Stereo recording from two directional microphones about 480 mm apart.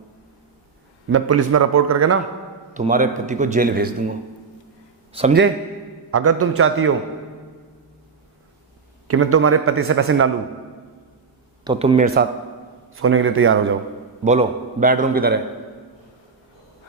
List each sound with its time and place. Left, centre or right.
1.1 s a man's voice: right
2.7 s a man's voice: centre
5.1 s a man's voice: centre
6.1 s a man's voice: right
9.0 s a man's voice: right
11.6 s a man's voice: centre